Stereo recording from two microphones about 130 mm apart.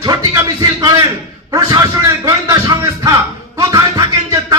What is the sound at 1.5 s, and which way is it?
Music, 30° right (ahead or behind).